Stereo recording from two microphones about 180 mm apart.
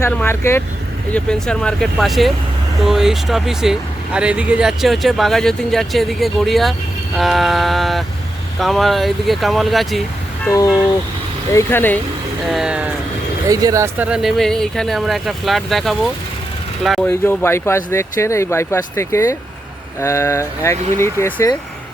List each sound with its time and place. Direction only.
0.0 s speech: 15° left (ahead or behind)
10.5 s speech: 15° left (ahead or behind)
12.5 s speech: 5° right (ahead or behind)
13.5 s speech: 20° right (ahead or behind)
14.1 s speech: centre (ahead or behind)
17.1 s speech: 15° left (ahead or behind)